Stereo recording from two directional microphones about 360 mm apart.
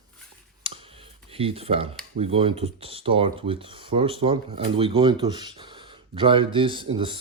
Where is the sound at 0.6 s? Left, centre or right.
Centre.